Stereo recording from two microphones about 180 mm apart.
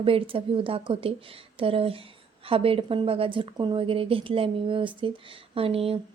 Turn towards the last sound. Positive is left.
turn(degrees=-30)  # may be behind; listen again after turning